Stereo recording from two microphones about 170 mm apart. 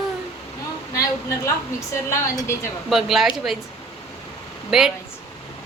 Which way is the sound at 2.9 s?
Centre (ahead or behind).